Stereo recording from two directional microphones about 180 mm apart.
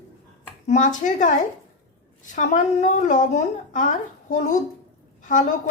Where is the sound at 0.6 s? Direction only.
40° left (ahead or behind).